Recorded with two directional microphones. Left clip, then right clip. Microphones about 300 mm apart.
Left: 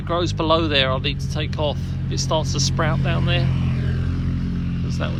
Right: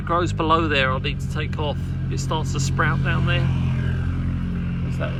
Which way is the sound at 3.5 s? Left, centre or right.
Right.